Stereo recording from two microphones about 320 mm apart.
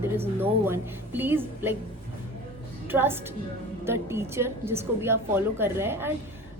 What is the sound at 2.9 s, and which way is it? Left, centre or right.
A woman's voice, centre.